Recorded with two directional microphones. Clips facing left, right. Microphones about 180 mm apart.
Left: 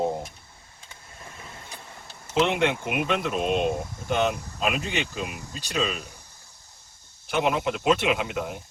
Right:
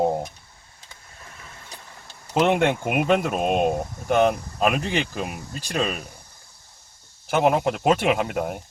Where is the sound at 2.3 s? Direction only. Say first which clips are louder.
Right 3 dB; 45° right (ahead or behind).